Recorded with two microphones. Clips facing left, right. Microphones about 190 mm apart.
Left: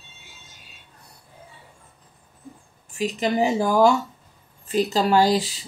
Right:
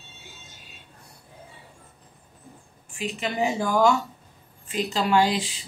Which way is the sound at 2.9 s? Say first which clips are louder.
Left 7 dB; 40° left (ahead or behind).